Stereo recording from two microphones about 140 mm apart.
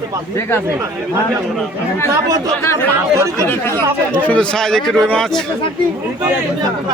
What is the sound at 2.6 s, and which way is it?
Speech, 20° left (ahead or behind).